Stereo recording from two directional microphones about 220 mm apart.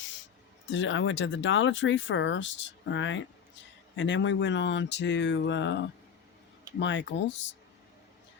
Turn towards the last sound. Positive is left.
turn(degrees=55)  # may be behind; listen again after turning